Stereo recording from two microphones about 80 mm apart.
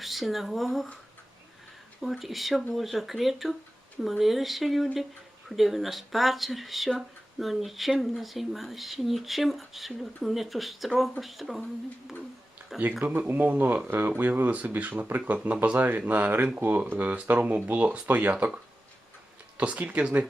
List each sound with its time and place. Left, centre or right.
0.0 s speech: centre
2.0 s speech: centre
13.1 s speech: right